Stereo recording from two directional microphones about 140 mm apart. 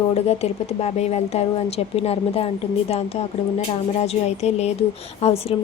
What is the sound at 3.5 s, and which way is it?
A woman's voice, 50° left (ahead or behind).